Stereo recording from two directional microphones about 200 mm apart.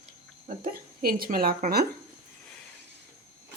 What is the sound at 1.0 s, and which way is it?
Speech, 45° right (ahead or behind).